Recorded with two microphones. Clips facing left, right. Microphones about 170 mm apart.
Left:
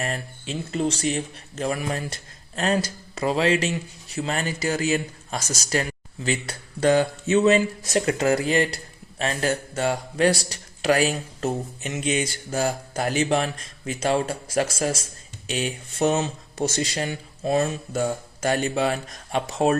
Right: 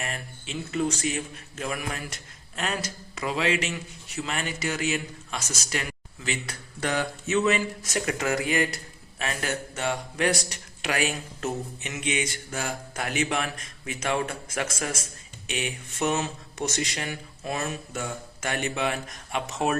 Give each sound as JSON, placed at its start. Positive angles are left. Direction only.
{"t": 0.0, "sound": "speech", "side_deg": 35}